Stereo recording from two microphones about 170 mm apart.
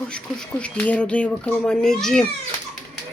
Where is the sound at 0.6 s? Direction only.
5° left (ahead or behind).